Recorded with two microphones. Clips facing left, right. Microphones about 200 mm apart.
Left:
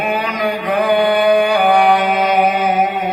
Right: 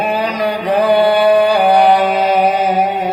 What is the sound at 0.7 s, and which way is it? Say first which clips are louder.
Mantra: right 3 dB; 30° right (ahead or behind).